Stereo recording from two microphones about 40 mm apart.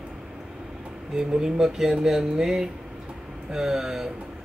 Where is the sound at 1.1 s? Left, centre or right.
Centre.